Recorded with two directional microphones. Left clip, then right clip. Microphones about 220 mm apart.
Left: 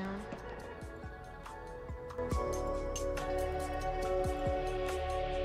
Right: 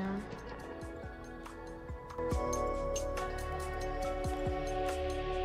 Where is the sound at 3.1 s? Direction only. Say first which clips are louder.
Left 3 dB; centre (ahead or behind).